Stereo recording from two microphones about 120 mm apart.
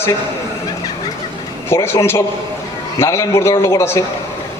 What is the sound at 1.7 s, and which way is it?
A man's voice, 20° left (ahead or behind).